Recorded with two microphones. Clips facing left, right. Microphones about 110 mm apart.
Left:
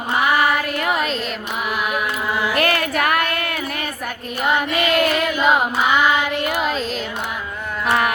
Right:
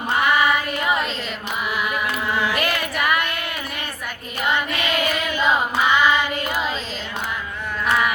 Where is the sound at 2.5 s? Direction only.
50° left (ahead or behind).